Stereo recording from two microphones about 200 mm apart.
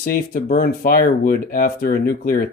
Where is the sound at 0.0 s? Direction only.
45° left (ahead or behind).